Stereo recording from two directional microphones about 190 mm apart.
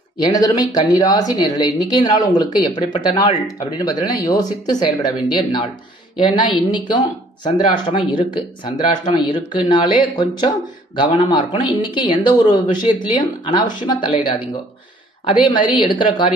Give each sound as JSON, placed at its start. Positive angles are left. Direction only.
{"t": 0.2, "sound": "speech", "side_deg": 20}